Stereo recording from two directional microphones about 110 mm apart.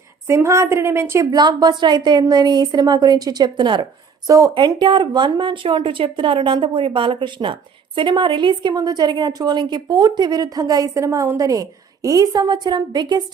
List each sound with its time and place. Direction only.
0.3 s a woman's voice: 25° right (ahead or behind)
1.3 s a woman's voice: 40° right (ahead or behind)